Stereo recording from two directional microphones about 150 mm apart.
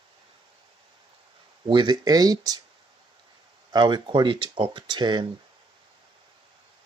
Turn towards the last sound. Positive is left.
turn(degrees=-30)  # may be behind; listen again after turning